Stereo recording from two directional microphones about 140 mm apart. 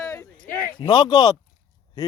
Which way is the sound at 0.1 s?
15° left (ahead or behind).